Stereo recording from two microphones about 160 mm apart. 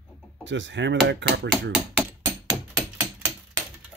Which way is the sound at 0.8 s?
90° right.